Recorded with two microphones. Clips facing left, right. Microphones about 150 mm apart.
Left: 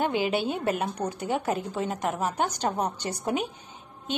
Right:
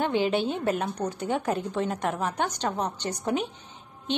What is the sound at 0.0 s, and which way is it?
A woman's voice, 10° left (ahead or behind).